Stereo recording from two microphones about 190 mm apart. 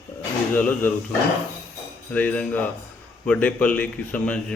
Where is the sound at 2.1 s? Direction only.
5° left (ahead or behind).